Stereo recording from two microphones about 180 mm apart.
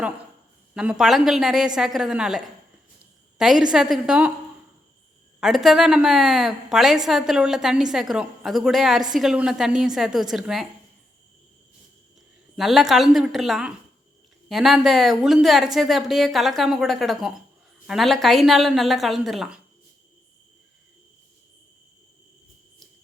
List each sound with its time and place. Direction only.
0.7 s a woman's voice: 5° right (ahead or behind)
5.4 s a woman's voice: centre (ahead or behind)
12.5 s a woman's voice: centre (ahead or behind)